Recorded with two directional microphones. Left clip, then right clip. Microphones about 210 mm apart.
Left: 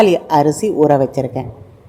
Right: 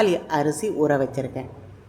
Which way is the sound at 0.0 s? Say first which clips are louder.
Left 9 dB; 20° left (ahead or behind).